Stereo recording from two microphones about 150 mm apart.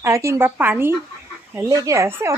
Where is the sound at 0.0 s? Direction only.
20° right (ahead or behind).